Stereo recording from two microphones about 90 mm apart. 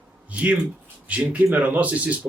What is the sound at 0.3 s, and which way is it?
Speech, 15° right (ahead or behind).